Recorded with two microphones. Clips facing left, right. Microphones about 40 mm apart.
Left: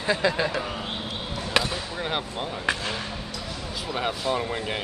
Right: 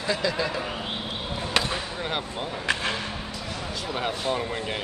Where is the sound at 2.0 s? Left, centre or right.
Centre.